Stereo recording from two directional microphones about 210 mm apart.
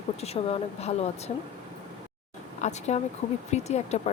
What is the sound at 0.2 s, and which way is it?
Speech, 30° left (ahead or behind).